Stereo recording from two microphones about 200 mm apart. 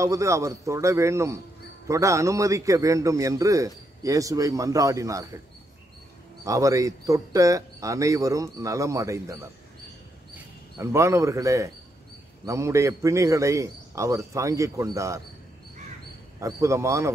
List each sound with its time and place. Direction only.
0.0 s a man's voice: 15° right (ahead or behind)
6.4 s a man's voice: 15° right (ahead or behind)
16.3 s a man's voice: 15° right (ahead or behind)